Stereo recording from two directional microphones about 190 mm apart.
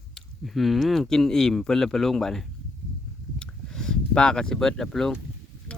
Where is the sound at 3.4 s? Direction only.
5° left (ahead or behind).